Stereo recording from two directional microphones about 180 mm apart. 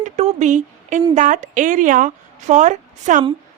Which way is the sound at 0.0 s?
40° right (ahead or behind).